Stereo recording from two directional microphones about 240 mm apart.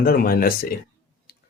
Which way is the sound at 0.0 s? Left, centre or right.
Left.